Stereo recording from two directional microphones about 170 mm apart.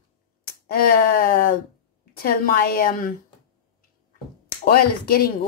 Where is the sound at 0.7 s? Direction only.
60° left (ahead or behind).